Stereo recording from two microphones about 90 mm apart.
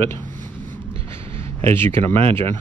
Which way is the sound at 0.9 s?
90° right.